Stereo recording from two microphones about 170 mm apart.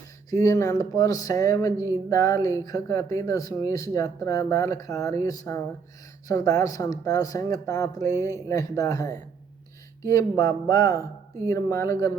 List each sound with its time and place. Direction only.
0.3 s speech: 20° left (ahead or behind)